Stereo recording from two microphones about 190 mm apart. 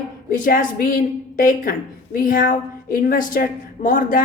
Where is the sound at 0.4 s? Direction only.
45° left (ahead or behind).